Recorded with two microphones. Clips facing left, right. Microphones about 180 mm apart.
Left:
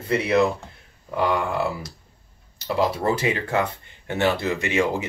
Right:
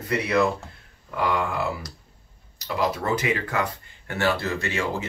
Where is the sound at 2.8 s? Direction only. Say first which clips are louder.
Left 2 dB; 30° left (ahead or behind).